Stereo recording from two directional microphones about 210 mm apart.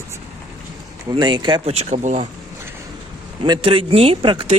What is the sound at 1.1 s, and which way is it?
Speech, 20° right (ahead or behind).